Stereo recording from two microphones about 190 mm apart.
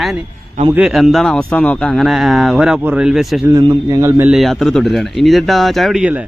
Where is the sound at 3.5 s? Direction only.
20° right (ahead or behind).